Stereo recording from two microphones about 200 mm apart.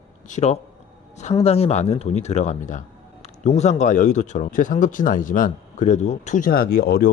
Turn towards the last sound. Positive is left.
turn(degrees=50)  # may be behind; listen again after turning